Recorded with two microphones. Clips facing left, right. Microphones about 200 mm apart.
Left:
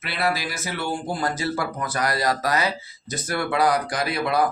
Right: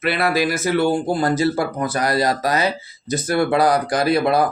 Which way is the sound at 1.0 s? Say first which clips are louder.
Right 8 dB; 30° right (ahead or behind).